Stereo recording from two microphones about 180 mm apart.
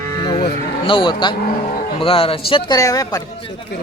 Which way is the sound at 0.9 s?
25° left (ahead or behind).